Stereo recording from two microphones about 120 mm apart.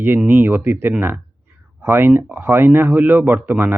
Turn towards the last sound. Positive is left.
turn(degrees=-15)  # may be behind; listen again after turning